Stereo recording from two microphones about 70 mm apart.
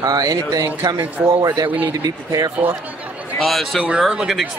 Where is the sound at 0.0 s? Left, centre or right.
Right.